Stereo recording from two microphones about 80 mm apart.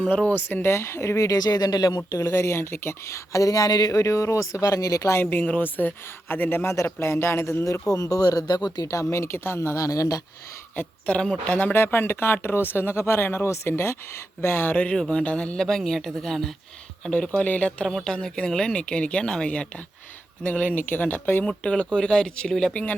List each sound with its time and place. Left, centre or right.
0.0 s speech: centre
0.6 s a woman's voice: left
2.0 s a woman's voice: left
5.2 s a man's voice: left
7.6 s a woman's voice: left
10.8 s speech: centre
11.7 s speech: left
14.9 s speech: centre
15.2 s speech: centre
21.4 s speech: centre